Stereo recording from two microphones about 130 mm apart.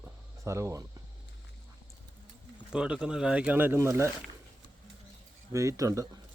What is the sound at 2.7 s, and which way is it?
Speech, 5° right (ahead or behind).